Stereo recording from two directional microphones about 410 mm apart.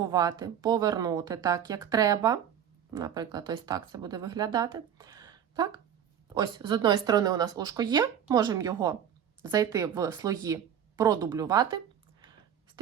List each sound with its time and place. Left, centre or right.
0.0 s speech: centre